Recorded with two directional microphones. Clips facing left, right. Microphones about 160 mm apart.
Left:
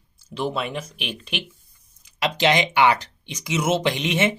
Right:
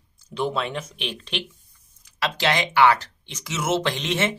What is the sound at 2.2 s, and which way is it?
Speech, 20° left (ahead or behind).